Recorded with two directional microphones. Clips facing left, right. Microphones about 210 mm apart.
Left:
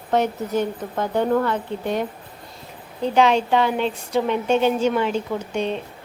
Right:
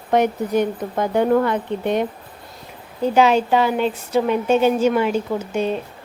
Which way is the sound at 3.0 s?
5° right (ahead or behind).